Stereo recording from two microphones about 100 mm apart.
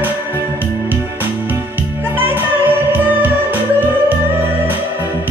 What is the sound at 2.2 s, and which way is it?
Music, 20° right (ahead or behind).